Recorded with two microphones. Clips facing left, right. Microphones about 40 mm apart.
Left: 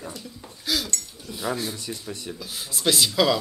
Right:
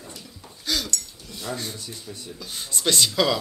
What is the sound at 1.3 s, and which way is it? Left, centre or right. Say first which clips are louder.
Speech: left 4 dB; centre.